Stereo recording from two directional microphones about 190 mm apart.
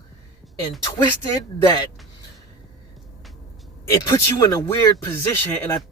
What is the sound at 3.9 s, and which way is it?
Speech, 20° left (ahead or behind).